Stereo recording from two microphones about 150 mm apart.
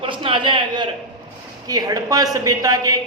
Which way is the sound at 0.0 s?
35° right (ahead or behind).